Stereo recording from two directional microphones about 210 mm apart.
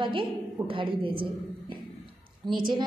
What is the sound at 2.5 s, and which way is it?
Speech, 20° right (ahead or behind).